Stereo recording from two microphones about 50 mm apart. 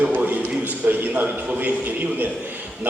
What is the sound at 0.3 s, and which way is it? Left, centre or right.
A man's voice, right.